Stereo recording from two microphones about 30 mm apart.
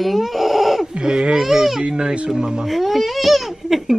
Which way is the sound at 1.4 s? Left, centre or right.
Centre.